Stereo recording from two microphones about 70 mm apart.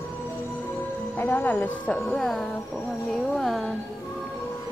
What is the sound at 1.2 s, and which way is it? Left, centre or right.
Speech, left.